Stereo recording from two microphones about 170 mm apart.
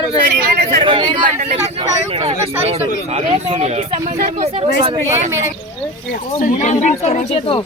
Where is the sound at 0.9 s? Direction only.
25° right (ahead or behind).